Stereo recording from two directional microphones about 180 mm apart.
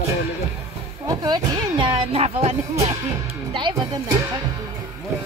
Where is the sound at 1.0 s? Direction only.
20° right (ahead or behind).